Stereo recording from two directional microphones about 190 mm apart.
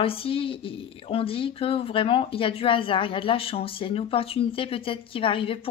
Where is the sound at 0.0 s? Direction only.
30° left (ahead or behind).